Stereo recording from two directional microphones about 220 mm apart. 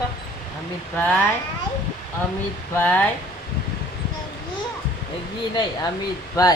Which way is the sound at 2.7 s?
5° left (ahead or behind).